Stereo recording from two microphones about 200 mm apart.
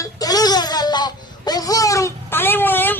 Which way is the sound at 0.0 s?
20° left (ahead or behind).